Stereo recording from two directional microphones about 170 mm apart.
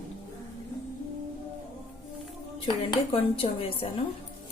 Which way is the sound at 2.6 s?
30° left (ahead or behind).